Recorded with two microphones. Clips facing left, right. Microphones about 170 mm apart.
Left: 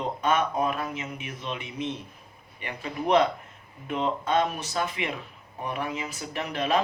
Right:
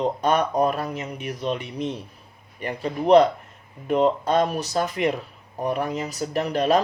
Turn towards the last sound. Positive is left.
turn(degrees=-40)  # may be behind; listen again after turning